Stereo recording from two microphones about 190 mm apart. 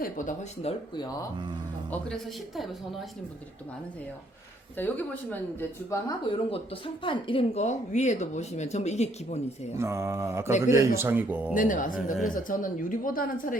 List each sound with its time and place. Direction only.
0.0 s speech: 40° left (ahead or behind)
4.8 s speech: 10° left (ahead or behind)
6.2 s speech: 25° left (ahead or behind)
9.7 s speech: 15° right (ahead or behind)
11.5 s speech: 45° left (ahead or behind)